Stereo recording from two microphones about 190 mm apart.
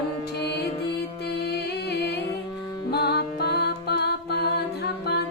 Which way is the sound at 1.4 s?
60° left (ahead or behind).